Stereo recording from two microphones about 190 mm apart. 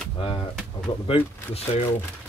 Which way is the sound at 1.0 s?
30° left (ahead or behind).